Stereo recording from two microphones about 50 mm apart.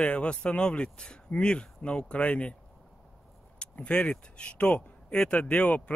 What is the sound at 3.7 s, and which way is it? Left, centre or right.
Speech, left.